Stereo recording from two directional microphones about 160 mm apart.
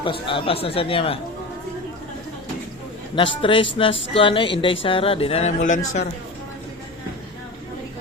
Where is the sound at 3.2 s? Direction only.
30° left (ahead or behind); by 6.0 s 50° left (ahead or behind).